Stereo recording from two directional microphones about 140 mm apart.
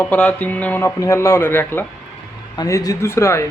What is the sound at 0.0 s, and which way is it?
A man's voice, 10° left (ahead or behind).